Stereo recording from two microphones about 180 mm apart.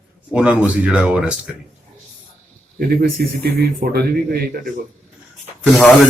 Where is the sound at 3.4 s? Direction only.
60° right (ahead or behind).